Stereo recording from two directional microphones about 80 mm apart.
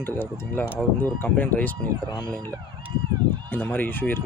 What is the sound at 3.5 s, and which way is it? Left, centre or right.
Speech, left.